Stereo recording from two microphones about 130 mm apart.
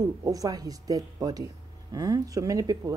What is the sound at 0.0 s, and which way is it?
Speech, 25° right (ahead or behind).